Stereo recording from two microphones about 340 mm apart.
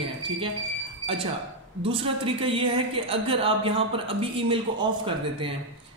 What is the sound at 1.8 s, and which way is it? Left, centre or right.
Speech, centre.